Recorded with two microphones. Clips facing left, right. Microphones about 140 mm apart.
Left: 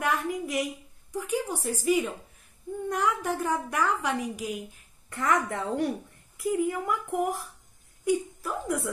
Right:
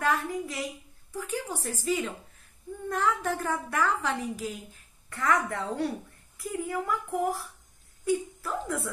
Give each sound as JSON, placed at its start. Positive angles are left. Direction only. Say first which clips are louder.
{"t": 0.0, "sound": "a woman's voice", "louder": "even", "side_deg": 15}